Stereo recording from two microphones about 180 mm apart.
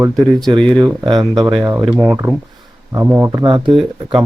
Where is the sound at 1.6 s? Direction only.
15° right (ahead or behind).